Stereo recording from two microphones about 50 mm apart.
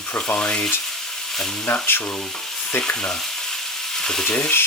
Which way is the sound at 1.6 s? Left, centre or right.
Left.